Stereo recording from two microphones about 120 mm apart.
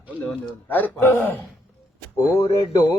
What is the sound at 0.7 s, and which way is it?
Speech, 15° left (ahead or behind).